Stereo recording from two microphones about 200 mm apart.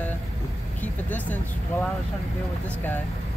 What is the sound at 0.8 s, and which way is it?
Speech, 10° left (ahead or behind).